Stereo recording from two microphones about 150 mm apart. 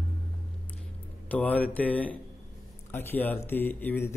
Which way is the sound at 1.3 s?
10° left (ahead or behind).